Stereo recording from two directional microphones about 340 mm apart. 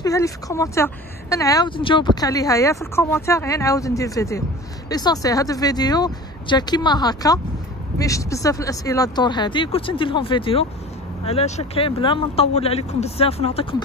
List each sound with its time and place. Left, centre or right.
0.0 s speech: centre